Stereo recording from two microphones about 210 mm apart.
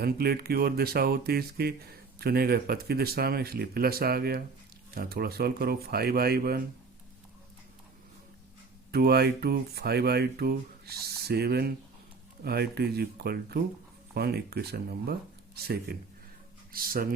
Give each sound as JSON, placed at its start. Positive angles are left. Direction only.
{"t": 0.0, "sound": "speech", "side_deg": -50}
{"t": 8.9, "sound": "speech", "side_deg": -50}